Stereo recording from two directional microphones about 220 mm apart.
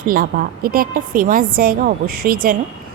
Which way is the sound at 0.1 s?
40° right (ahead or behind).